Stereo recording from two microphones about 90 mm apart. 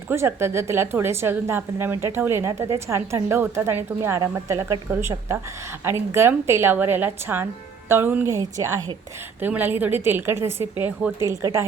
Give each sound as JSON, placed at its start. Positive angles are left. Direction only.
{"t": 0.1, "sound": "a woman's voice", "side_deg": -30}
{"t": 8.4, "sound": "speech", "side_deg": -35}
{"t": 9.4, "sound": "a woman's voice", "side_deg": -20}
{"t": 11.2, "sound": "speech", "side_deg": -35}